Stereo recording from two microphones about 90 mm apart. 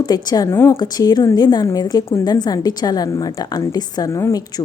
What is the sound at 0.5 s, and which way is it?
Speech, 30° left (ahead or behind).